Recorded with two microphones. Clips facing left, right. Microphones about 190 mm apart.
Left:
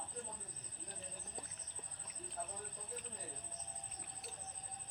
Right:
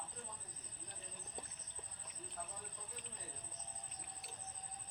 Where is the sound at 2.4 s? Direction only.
35° left (ahead or behind).